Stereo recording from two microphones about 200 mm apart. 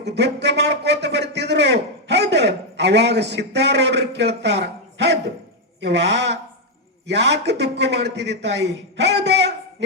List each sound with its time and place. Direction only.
0.0 s a man's voice: 60° right (ahead or behind)